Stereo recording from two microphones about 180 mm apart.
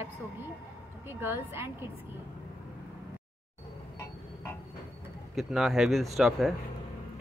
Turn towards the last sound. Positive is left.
turn(degrees=0)  # may be behind; listen again after turning